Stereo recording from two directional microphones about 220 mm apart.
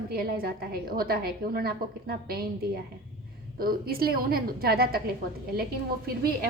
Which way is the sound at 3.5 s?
45° right (ahead or behind).